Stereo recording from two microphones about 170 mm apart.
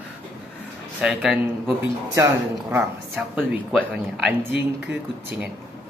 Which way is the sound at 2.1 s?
20° right (ahead or behind).